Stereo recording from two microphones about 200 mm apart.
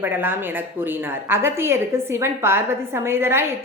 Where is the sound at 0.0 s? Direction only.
10° right (ahead or behind).